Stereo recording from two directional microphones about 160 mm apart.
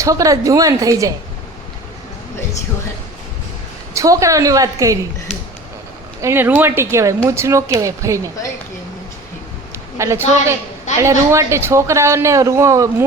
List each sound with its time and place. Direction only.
0.0 s a woman's voice: 20° right (ahead or behind)
3.9 s a woman's voice: 20° right (ahead or behind)
6.2 s a man's voice: 15° right (ahead or behind)
10.0 s a man's voice: 15° right (ahead or behind)